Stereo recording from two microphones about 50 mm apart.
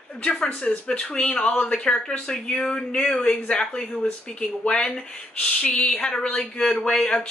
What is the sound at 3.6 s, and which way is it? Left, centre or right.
Speech, centre.